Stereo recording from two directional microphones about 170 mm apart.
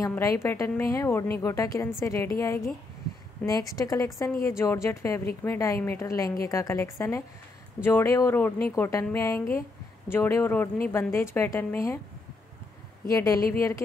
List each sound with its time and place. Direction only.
0.0 s a woman's voice: 20° left (ahead or behind)
13.1 s a woman's voice: 15° left (ahead or behind)